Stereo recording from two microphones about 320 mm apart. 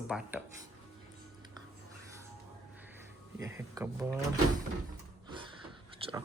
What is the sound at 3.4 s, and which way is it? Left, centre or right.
Speech, centre.